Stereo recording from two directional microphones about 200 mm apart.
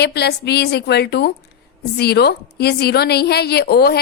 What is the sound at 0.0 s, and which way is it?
A woman's voice, 55° left (ahead or behind).